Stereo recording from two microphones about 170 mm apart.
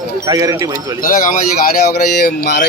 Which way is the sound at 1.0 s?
50° left (ahead or behind).